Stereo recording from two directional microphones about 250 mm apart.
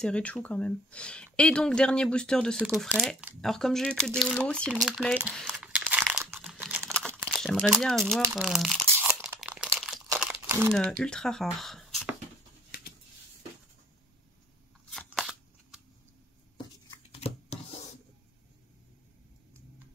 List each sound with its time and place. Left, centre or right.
0.0 s speech: centre
4.8 s crumpling: centre
7.2 s speech: centre
8.3 s crumpling: centre
10.7 s speech: centre
14.9 s a sound: centre
16.5 s a sound: left